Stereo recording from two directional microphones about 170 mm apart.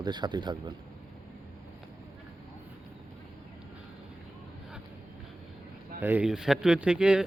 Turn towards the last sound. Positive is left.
turn(degrees=-5)  # may be behind; listen again after turning